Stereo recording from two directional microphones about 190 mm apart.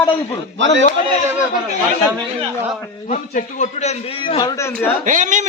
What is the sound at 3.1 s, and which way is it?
A man's voice, 40° left (ahead or behind).